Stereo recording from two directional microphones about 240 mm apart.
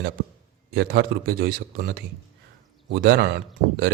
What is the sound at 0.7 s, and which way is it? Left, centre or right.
A man's voice, right.